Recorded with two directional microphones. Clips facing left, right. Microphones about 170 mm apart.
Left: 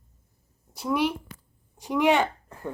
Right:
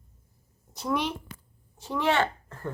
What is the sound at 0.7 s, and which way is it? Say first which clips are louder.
A woman's voice: left 3 dB; 10° left (ahead or behind).